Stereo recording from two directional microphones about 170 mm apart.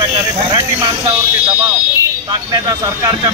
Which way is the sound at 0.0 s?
25° right (ahead or behind).